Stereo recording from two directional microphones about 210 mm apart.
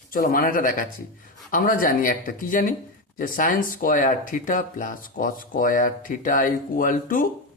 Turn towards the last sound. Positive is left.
turn(degrees=40)  # may be behind; listen again after turning